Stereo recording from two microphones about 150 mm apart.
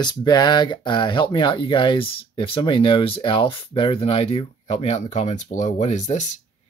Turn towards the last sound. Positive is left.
turn(degrees=55)  # may be behind; listen again after turning